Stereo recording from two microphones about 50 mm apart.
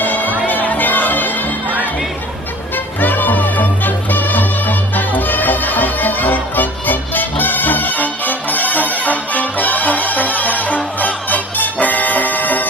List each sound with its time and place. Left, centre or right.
0.0 s music: left
1.6 s music: right
2.7 s music: left